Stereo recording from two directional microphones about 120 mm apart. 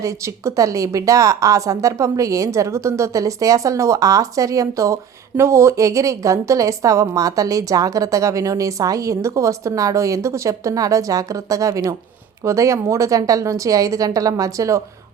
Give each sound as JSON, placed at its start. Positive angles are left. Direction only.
{"t": 0.0, "sound": "a woman's voice", "side_deg": -25}